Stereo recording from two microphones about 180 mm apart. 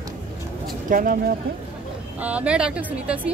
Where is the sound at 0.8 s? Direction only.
50° right (ahead or behind).